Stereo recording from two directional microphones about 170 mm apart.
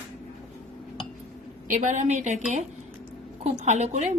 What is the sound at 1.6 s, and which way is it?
Speech, 45° right (ahead or behind).